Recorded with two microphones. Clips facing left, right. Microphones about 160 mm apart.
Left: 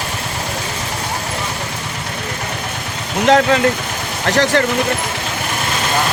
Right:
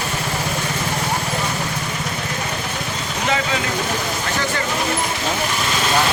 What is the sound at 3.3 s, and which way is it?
Speech, 60° left (ahead or behind).